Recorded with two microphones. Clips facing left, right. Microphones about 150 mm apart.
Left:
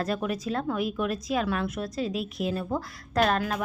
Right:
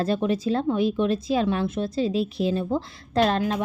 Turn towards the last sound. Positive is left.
turn(degrees=-30)  # may be behind; listen again after turning